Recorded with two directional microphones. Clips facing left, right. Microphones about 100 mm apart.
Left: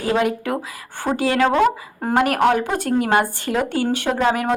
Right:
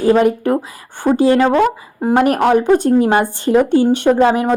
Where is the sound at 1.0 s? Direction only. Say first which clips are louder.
Right 6 dB; 25° right (ahead or behind).